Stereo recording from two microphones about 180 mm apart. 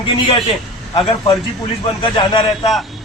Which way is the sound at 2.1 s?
25° left (ahead or behind).